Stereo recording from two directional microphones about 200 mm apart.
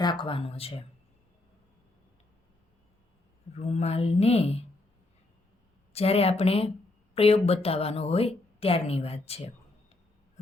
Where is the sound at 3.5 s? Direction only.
35° left (ahead or behind).